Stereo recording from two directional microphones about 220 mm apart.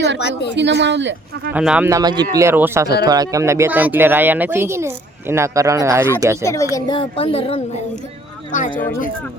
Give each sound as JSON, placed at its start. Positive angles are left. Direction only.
{"t": 0.2, "sound": "a woman's voice", "side_deg": 50}
{"t": 0.5, "sound": "speech", "side_deg": -50}
{"t": 1.5, "sound": "speech", "side_deg": -5}
{"t": 6.4, "sound": "a woman's voice", "side_deg": 15}